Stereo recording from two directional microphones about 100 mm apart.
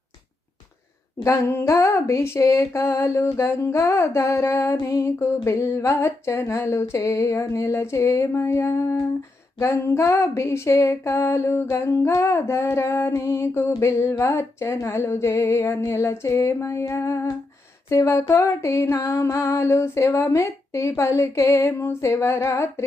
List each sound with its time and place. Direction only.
1.2 s female singing: 30° left (ahead or behind)